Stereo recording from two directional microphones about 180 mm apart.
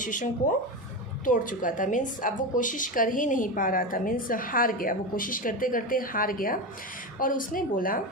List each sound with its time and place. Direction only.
0.0 s a woman's voice: 45° left (ahead or behind)